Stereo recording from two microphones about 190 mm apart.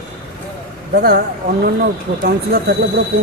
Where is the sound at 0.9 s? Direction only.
55° right (ahead or behind).